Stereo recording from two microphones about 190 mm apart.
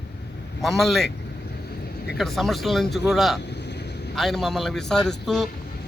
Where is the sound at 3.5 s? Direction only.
65° left (ahead or behind).